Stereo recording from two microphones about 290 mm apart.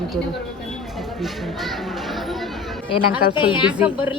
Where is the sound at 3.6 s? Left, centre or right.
Centre.